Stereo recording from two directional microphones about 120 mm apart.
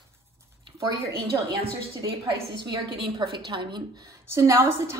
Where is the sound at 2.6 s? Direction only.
40° right (ahead or behind).